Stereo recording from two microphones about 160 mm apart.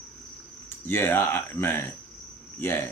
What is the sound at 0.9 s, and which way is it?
Speech, 15° left (ahead or behind).